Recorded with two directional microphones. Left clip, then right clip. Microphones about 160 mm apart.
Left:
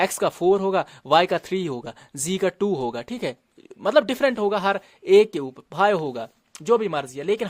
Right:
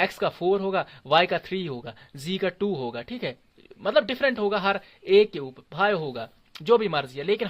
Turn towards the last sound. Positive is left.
turn(degrees=30)  # may be behind; listen again after turning